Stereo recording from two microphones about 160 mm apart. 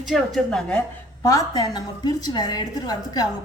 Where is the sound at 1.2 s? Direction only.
20° left (ahead or behind).